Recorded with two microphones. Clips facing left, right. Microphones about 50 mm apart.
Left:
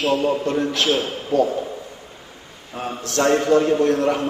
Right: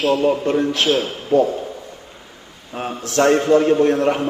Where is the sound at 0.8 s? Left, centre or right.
Centre.